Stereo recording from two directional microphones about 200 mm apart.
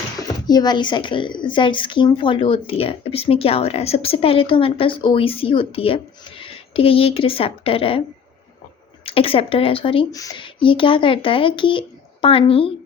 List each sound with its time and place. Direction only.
0.2 s speech: 20° left (ahead or behind)
9.0 s speech: 30° left (ahead or behind)